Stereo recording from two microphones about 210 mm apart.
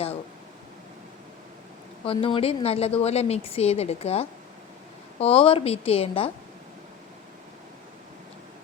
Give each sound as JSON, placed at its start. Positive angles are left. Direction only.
{"t": 2.0, "sound": "a woman's voice", "side_deg": 25}